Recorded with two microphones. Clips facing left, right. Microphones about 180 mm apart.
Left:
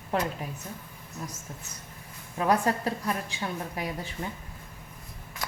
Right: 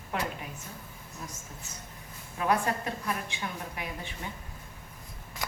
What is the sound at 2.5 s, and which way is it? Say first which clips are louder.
A woman's voice: left 3 dB; 35° left (ahead or behind).